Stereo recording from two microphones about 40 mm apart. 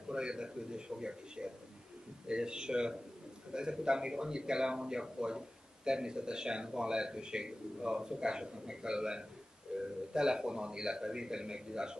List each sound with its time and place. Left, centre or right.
0.1 s a man's voice: right
9.7 s a sound: right
10.1 s a man's voice: centre